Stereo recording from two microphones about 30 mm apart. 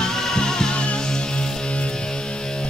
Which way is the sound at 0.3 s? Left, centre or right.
Left.